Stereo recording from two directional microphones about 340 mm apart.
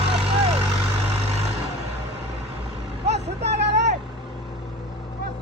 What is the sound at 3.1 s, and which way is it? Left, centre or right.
Vehicle, right.